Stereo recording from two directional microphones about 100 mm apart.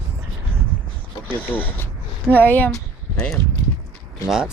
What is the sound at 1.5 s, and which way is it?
Speech, 20° left (ahead or behind).